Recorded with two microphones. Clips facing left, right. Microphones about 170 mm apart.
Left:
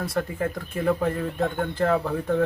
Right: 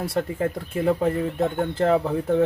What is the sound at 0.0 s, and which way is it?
Speech, 30° right (ahead or behind).